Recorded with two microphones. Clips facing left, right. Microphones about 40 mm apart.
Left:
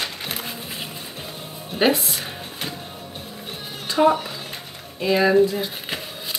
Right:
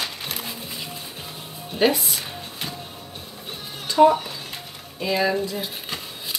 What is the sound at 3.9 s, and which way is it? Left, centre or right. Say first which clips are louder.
Speech: right 2 dB; centre.